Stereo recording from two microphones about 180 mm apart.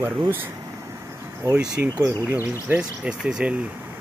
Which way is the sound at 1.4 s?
20° right (ahead or behind).